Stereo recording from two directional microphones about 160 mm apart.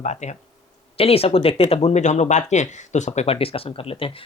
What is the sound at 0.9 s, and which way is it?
Speech, 40° left (ahead or behind).